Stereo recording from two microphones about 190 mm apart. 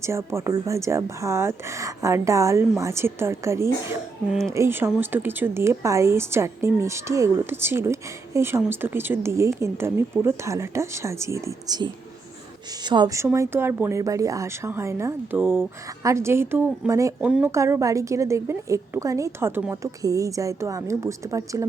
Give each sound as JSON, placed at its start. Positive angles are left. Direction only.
{"t": 0.0, "sound": "a woman's voice", "side_deg": -15}
{"t": 4.3, "sound": "speech", "side_deg": 0}
{"t": 4.5, "sound": "a woman's voice", "side_deg": -15}
{"t": 17.2, "sound": "a woman's voice", "side_deg": -5}